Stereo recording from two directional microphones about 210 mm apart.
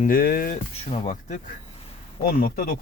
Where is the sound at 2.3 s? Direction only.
45° left (ahead or behind).